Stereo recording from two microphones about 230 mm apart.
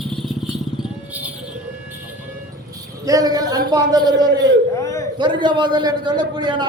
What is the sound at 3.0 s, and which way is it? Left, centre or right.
A man's voice, centre.